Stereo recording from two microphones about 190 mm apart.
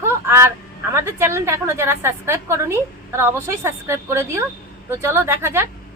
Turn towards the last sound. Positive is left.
turn(degrees=-15)  # may be behind; listen again after turning